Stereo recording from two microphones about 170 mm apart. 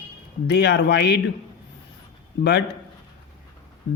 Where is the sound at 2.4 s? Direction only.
80° left.